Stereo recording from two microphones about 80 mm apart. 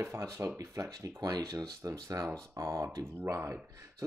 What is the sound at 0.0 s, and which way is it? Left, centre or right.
Speech, right.